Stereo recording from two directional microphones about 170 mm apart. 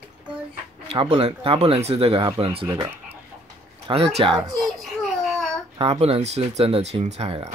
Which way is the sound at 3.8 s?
35° right (ahead or behind).